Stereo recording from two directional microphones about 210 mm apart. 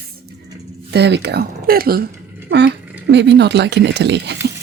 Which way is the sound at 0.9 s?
55° right (ahead or behind).